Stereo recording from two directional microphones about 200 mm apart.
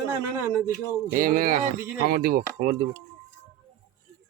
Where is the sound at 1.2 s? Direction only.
45° right (ahead or behind).